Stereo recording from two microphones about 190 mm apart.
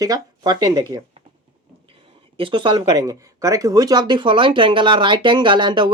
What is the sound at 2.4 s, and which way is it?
Speech, 25° right (ahead or behind).